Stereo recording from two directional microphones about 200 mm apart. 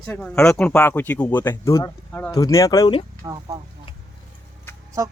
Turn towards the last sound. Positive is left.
turn(degrees=-15)  # may be behind; listen again after turning